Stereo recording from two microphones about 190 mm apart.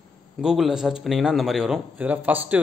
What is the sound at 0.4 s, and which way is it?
A man's voice, centre (ahead or behind).